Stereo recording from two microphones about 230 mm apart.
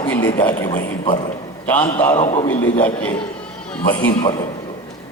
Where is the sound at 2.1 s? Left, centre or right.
Left.